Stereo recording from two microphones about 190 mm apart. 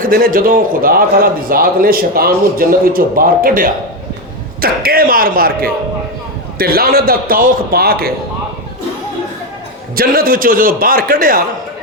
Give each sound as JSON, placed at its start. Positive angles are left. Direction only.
{"t": 0.0, "sound": "a man's voice", "side_deg": -50}
{"t": 9.9, "sound": "a man's voice", "side_deg": -50}